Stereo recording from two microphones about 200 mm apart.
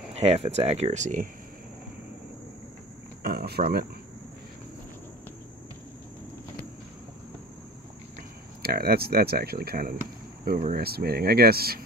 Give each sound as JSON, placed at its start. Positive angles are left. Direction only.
{"t": 0.1, "sound": "speech", "side_deg": -30}
{"t": 3.2, "sound": "a sound", "side_deg": -50}
{"t": 8.6, "sound": "speech", "side_deg": -50}